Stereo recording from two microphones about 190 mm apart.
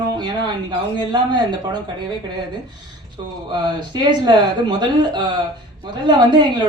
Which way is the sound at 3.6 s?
25° right (ahead or behind).